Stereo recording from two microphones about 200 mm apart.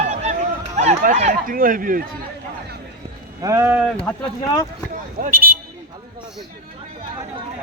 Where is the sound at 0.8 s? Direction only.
35° right (ahead or behind).